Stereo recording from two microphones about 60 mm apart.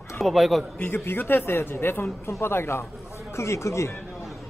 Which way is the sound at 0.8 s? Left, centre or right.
Left.